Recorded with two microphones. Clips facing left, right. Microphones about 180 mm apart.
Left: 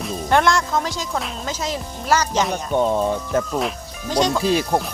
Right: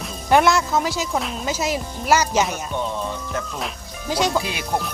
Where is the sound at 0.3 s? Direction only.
5° right (ahead or behind).